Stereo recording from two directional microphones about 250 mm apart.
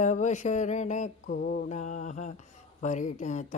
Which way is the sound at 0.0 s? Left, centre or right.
Left.